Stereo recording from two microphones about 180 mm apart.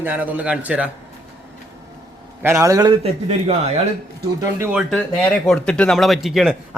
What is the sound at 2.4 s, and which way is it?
Speech, 15° right (ahead or behind).